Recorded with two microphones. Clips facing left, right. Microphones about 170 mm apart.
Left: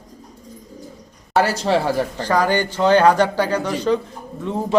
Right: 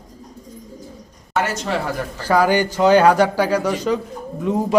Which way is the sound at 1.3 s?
35° left (ahead or behind).